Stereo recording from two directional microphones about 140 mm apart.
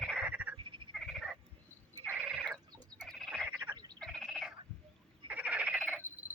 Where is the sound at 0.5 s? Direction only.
35° right (ahead or behind).